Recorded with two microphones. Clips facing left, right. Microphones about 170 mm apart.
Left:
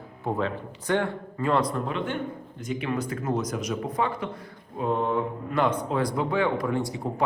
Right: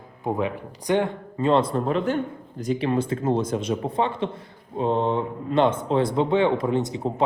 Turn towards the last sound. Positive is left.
turn(degrees=-20)  # may be behind; listen again after turning